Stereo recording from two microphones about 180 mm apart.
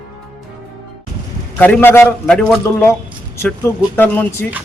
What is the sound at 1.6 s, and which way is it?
Speech, 10° left (ahead or behind).